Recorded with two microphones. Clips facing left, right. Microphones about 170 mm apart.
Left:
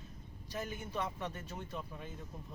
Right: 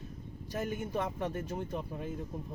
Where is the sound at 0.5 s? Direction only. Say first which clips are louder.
Right 5 dB; 50° right (ahead or behind).